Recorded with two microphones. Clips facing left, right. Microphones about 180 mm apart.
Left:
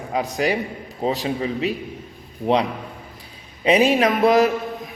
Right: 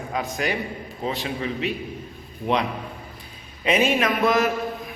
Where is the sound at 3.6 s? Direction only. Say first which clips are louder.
Left 4 dB; 35° left (ahead or behind).